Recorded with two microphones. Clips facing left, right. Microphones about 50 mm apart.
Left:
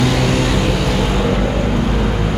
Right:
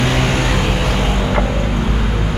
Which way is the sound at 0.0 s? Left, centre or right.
Right.